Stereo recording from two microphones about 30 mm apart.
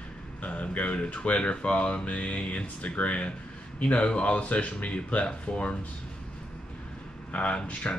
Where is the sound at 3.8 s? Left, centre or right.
Left.